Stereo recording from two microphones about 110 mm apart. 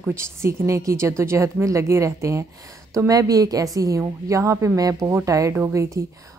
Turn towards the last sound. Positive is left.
turn(degrees=-25)  # may be behind; listen again after turning